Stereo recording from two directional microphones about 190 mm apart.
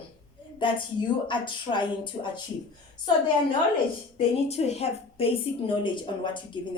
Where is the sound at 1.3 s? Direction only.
25° left (ahead or behind).